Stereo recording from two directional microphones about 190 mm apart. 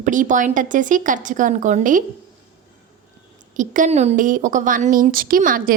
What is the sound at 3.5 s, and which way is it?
Speech, 45° right (ahead or behind).